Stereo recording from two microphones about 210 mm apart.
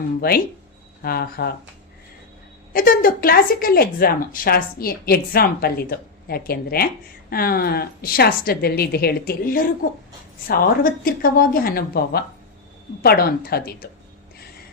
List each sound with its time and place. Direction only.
0.2 s speech: 45° left (ahead or behind)
2.7 s speech: 40° left (ahead or behind)
11.0 s speech: 45° left (ahead or behind)